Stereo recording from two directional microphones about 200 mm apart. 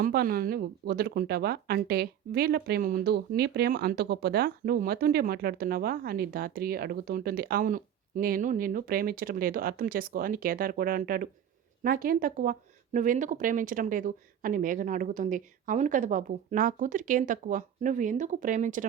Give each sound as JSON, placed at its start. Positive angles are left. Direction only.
{"t": 0.0, "sound": "speech", "side_deg": -45}